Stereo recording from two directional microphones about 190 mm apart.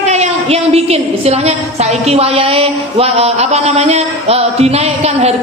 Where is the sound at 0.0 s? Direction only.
35° right (ahead or behind).